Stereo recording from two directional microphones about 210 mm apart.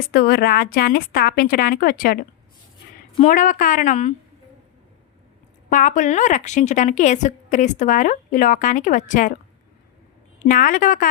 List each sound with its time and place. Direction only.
0.1 s a woman's voice: 50° left (ahead or behind)
3.2 s a woman's voice: 40° left (ahead or behind)
5.7 s a woman's voice: 35° left (ahead or behind)
10.4 s a woman's voice: 40° left (ahead or behind)